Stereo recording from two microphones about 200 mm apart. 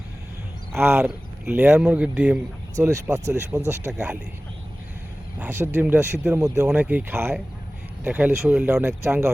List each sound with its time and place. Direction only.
0.7 s speech: 5° right (ahead or behind)
2.7 s speech: 15° right (ahead or behind)
3.7 s speech: 5° right (ahead or behind)
5.4 s speech: 10° right (ahead or behind)